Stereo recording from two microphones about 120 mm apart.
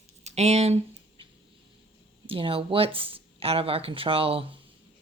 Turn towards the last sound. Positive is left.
turn(degrees=-50)  # may be behind; listen again after turning